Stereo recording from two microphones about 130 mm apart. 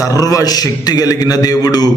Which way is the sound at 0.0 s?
25° left (ahead or behind).